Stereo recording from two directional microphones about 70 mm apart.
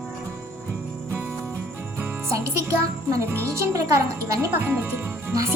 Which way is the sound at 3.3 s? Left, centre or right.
Right.